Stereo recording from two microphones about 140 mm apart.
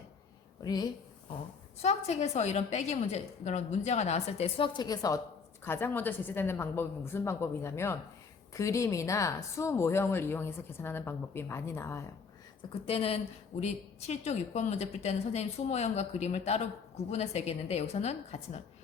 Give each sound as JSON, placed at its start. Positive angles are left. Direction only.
{"t": 0.6, "sound": "a woman's voice", "side_deg": 30}
{"t": 1.8, "sound": "a woman's voice", "side_deg": 50}
{"t": 5.6, "sound": "speech", "side_deg": 15}
{"t": 12.8, "sound": "a woman's voice", "side_deg": 45}